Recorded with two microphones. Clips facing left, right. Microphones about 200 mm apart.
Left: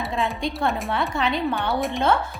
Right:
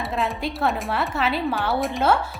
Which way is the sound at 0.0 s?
Centre (ahead or behind).